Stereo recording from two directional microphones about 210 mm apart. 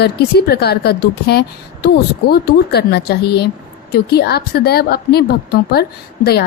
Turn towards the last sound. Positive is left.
turn(degrees=50)  # may be behind; listen again after turning